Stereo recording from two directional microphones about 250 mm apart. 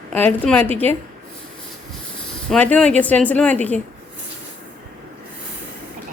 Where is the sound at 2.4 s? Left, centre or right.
Centre.